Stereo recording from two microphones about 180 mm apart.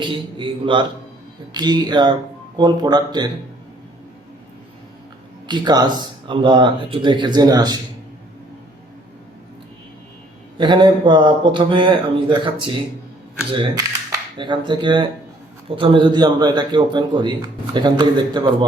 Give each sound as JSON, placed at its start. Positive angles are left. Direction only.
{"t": 0.0, "sound": "a man's voice", "side_deg": -25}
{"t": 5.5, "sound": "a man's voice", "side_deg": -25}
{"t": 10.6, "sound": "a man's voice", "side_deg": -25}